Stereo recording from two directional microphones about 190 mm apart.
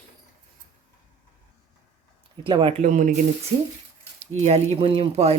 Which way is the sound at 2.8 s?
40° right (ahead or behind).